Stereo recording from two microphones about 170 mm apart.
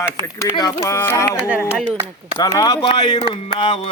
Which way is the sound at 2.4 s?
20° left (ahead or behind).